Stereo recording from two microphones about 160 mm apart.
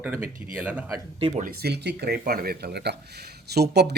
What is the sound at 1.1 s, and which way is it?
Speech, 35° right (ahead or behind).